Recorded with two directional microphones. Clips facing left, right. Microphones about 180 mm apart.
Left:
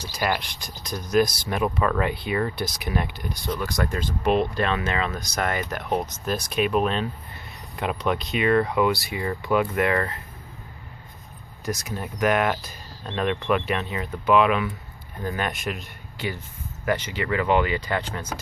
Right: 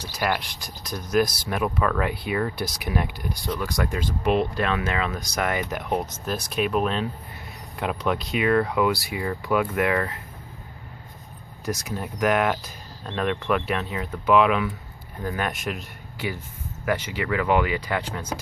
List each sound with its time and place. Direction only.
0.0 s speech: centre (ahead or behind)
11.6 s speech: 10° right (ahead or behind)